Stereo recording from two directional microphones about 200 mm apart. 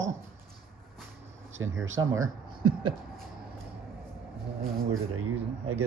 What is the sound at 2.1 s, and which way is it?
Speech, 15° right (ahead or behind).